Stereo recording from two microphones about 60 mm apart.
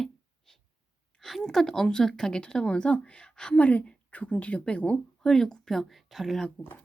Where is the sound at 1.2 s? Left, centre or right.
Centre.